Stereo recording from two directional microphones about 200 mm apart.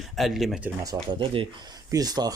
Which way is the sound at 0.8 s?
20° right (ahead or behind).